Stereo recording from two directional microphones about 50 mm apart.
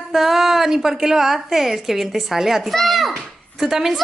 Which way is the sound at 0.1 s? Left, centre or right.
Centre.